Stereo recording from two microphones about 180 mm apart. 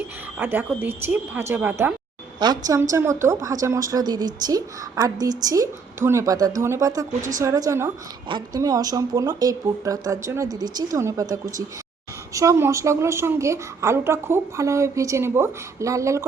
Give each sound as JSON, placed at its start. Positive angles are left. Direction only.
{"t": 0.3, "sound": "a woman's voice", "side_deg": -10}
{"t": 2.4, "sound": "a woman's voice", "side_deg": -20}